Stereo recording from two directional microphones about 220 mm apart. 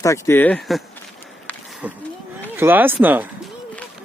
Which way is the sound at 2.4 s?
10° right (ahead or behind).